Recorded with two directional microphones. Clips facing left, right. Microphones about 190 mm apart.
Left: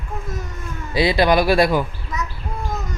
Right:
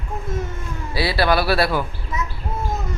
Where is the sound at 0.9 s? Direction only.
20° left (ahead or behind).